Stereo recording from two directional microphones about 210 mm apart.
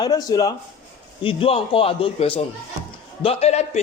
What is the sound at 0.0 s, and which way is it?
A man's voice, 20° left (ahead or behind).